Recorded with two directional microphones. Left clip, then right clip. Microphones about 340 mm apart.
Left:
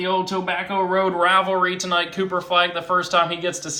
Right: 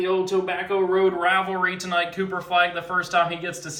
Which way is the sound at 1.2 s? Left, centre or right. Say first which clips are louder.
Left 4 dB; centre.